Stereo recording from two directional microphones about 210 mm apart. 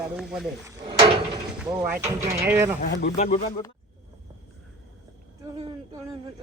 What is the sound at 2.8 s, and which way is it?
Speech, 35° left (ahead or behind).